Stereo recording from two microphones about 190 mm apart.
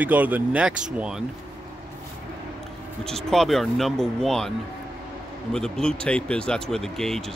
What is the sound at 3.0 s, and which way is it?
Speech, centre (ahead or behind).